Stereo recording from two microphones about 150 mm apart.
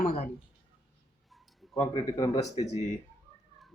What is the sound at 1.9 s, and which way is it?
Speech, 30° left (ahead or behind).